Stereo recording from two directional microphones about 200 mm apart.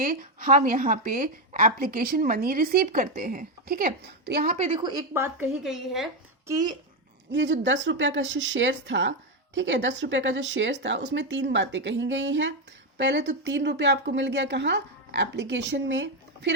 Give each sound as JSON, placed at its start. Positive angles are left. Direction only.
{"t": 0.0, "sound": "speech", "side_deg": -45}
{"t": 4.5, "sound": "a woman's voice", "side_deg": -35}
{"t": 4.8, "sound": "a woman's voice", "side_deg": -20}
{"t": 5.6, "sound": "a woman's voice", "side_deg": 0}
{"t": 6.5, "sound": "a child's voice", "side_deg": -20}
{"t": 7.3, "sound": "a woman's voice", "side_deg": -65}